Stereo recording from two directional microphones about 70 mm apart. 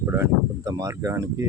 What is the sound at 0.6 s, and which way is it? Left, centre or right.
Speech, right.